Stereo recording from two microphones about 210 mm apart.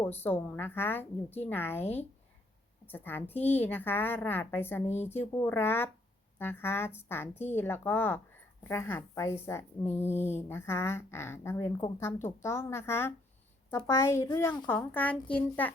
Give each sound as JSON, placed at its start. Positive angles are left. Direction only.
{"t": 0.2, "sound": "a woman's voice", "side_deg": 10}
{"t": 2.8, "sound": "a woman's voice", "side_deg": 10}